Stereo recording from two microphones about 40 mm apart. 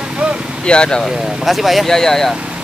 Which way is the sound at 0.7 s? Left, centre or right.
Left.